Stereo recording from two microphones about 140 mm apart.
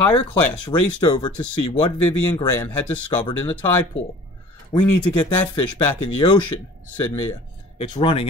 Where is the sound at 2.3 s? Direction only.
15° left (ahead or behind).